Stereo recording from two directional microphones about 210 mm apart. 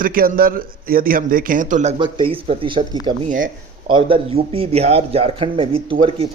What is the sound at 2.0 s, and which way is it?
Speech, 20° right (ahead or behind).